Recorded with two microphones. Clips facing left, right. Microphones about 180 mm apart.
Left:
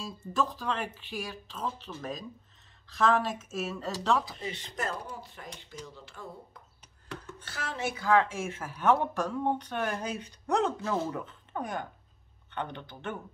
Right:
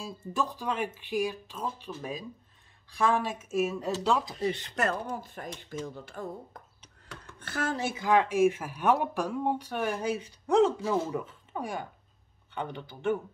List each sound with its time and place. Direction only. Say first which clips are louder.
0.4 s speech: even; 10° right (ahead or behind)
4.5 s speech: right 6 dB; 65° right (ahead or behind)
5.2 s speech: right 5 dB; 50° right (ahead or behind)
7.9 s speech: even; 15° right (ahead or behind)